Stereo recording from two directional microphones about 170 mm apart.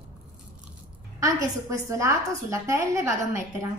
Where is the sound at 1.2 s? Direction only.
20° right (ahead or behind).